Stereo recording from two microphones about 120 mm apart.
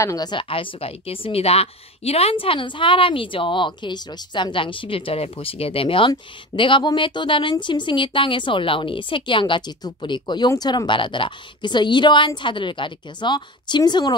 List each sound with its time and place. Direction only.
0.0 s a woman's voice: 30° left (ahead or behind)